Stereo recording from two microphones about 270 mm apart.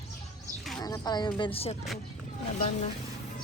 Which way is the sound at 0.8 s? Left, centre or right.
Centre.